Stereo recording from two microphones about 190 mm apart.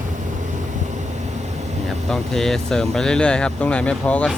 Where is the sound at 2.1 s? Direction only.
Centre (ahead or behind).